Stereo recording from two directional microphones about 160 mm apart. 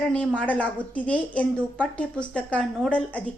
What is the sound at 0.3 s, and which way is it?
A woman's voice, 10° left (ahead or behind).